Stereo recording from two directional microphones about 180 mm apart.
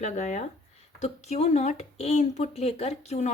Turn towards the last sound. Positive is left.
turn(degrees=40)  # may be behind; listen again after turning